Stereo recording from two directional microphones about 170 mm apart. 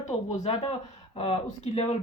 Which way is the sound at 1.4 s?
45° left (ahead or behind).